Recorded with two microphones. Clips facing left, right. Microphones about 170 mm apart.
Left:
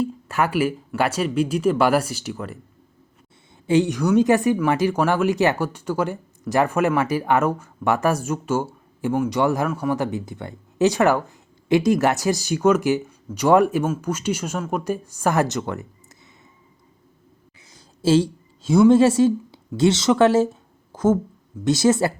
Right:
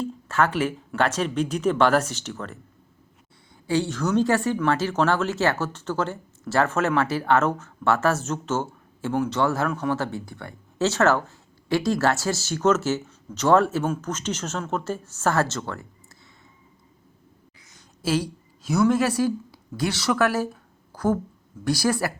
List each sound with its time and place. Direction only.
0.0 s speech: 10° left (ahead or behind)
3.7 s speech: 15° left (ahead or behind)
17.7 s a woman's voice: 30° left (ahead or behind)